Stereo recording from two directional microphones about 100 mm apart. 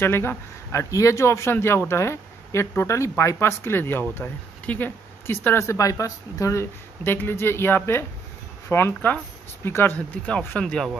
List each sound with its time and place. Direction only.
0.0 s speech: 25° left (ahead or behind)
9.9 s speech: 10° left (ahead or behind)